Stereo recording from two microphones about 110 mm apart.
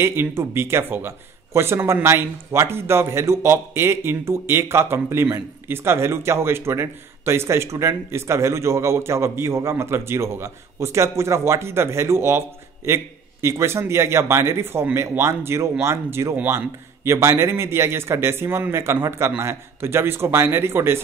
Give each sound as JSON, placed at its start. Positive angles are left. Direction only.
{"t": 0.0, "sound": "a man's voice", "side_deg": -20}